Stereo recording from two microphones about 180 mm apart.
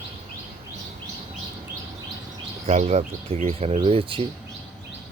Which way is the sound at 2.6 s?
35° right (ahead or behind).